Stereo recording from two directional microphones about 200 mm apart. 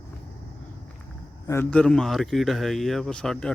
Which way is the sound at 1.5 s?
10° left (ahead or behind).